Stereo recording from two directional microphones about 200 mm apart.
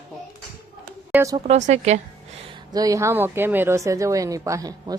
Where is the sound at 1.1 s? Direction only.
15° right (ahead or behind).